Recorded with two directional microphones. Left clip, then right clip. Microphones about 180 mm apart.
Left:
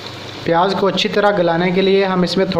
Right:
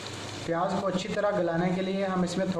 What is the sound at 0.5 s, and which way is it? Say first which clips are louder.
A man's voice: left 14 dB; 45° left (ahead or behind).